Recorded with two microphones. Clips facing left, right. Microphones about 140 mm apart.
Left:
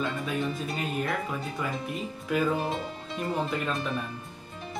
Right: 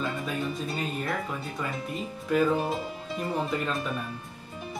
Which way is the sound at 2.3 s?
Centre (ahead or behind).